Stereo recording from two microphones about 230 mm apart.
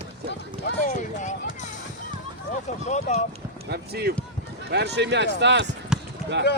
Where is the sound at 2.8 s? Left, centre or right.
Left.